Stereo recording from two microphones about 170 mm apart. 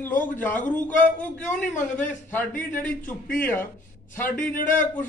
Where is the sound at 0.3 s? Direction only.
10° left (ahead or behind).